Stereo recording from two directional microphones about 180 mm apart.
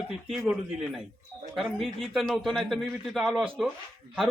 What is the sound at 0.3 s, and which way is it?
A man's voice, 5° right (ahead or behind).